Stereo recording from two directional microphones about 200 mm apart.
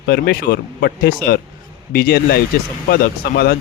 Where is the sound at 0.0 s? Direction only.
50° left (ahead or behind).